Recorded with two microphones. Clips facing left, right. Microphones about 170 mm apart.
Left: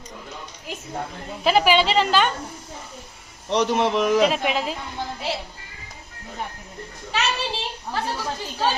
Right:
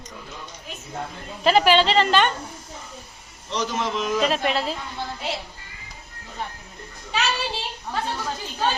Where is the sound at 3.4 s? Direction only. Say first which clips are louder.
Left 6 dB; 60° left (ahead or behind).